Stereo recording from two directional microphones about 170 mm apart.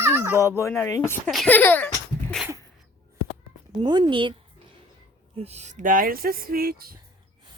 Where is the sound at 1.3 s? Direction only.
5° left (ahead or behind).